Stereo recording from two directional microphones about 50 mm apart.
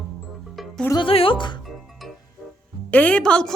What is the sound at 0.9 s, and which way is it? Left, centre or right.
Speech, left.